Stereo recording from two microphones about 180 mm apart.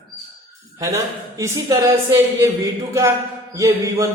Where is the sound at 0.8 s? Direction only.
15° right (ahead or behind).